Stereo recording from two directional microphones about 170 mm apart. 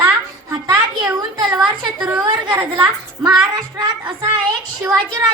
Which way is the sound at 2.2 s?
20° right (ahead or behind).